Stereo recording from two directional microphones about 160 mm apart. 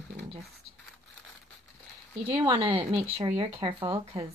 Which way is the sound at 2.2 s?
30° right (ahead or behind).